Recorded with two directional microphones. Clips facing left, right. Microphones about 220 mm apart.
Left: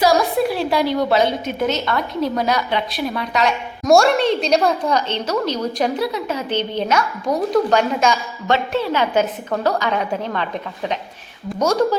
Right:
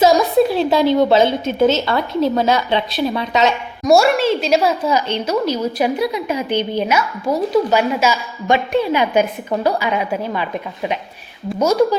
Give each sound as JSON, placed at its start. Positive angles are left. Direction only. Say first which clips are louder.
{"t": 0.0, "sound": "a woman's voice", "louder": "right 4 dB", "side_deg": -25}
{"t": 3.8, "sound": "a woman's voice", "louder": "right 1 dB", "side_deg": -5}